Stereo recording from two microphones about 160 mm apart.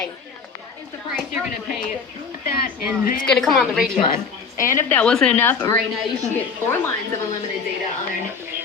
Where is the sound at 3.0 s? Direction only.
60° left (ahead or behind).